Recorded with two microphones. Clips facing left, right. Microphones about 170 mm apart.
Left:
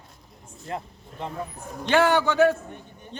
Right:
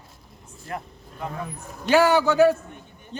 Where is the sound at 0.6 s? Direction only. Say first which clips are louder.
Left 1 dB; 25° left (ahead or behind).